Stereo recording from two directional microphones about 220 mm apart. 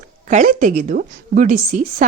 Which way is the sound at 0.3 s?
35° right (ahead or behind).